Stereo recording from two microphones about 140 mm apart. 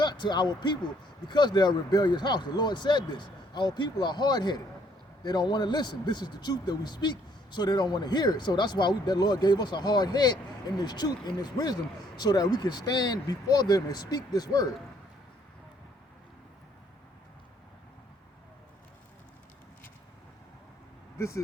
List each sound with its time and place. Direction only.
0.0 s a man's voice: 30° left (ahead or behind)
21.2 s speech: 20° left (ahead or behind)